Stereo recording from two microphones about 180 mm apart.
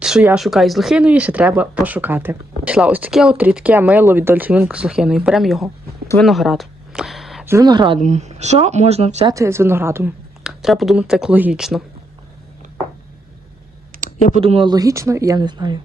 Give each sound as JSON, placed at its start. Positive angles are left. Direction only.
{"t": 0.0, "sound": "speech", "side_deg": -5}
{"t": 6.1, "sound": "a sound", "side_deg": 0}
{"t": 7.4, "sound": "speech", "side_deg": -20}
{"t": 7.9, "sound": "speech", "side_deg": -40}
{"t": 9.3, "sound": "speech", "side_deg": -15}
{"t": 10.4, "sound": "speech", "side_deg": 0}
{"t": 14.3, "sound": "speech", "side_deg": -30}